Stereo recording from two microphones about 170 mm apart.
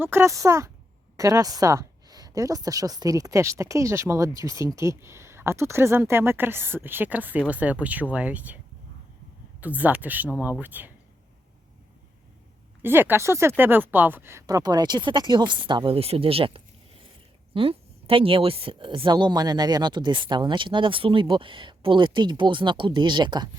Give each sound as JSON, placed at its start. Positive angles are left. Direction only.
{"t": 0.0, "sound": "a woman's voice", "side_deg": -15}
{"t": 9.6, "sound": "a woman's voice", "side_deg": -10}
{"t": 12.8, "sound": "a woman's voice", "side_deg": -15}